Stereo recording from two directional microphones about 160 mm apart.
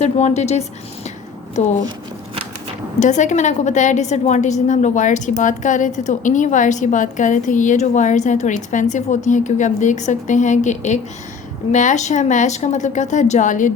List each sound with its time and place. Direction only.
0.0 s a woman's voice: 45° left (ahead or behind)
3.0 s a woman's voice: 50° left (ahead or behind)